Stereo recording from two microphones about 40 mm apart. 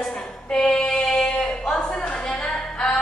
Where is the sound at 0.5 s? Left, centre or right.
Left.